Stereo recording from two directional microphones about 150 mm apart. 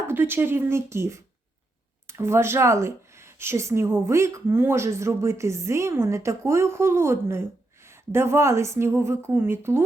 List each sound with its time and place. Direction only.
0.1 s speech: 15° right (ahead or behind)